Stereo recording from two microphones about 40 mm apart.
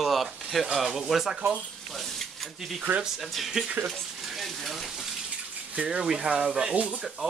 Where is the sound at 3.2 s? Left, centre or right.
Centre.